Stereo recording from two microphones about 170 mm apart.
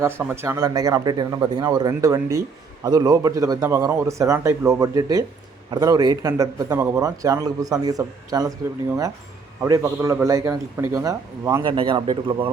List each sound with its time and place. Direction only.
0.0 s a man's voice: 10° right (ahead or behind)
11.6 s a man's voice: 30° right (ahead or behind)